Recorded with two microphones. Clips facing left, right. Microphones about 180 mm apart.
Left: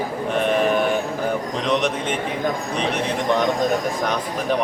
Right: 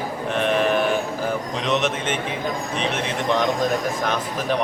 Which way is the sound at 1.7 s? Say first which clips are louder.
Left 1 dB; centre (ahead or behind).